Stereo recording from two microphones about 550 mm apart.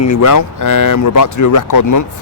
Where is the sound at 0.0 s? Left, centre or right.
Left.